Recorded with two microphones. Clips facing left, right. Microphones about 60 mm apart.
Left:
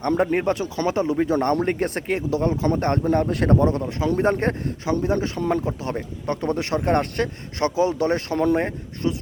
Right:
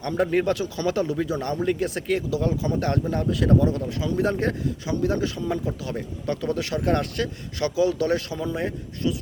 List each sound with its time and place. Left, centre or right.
0.2 s speech: left
1.3 s speech: left
8.3 s speech: left
8.6 s speech: left